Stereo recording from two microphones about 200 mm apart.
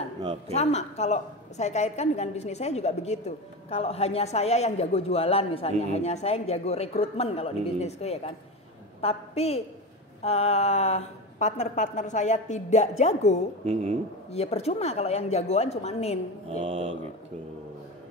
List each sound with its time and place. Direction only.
0.6 s a woman's voice: 35° left (ahead or behind)
13.7 s mantra: 30° right (ahead or behind)
14.3 s a woman's voice: 30° left (ahead or behind)
16.4 s mantra: 30° right (ahead or behind)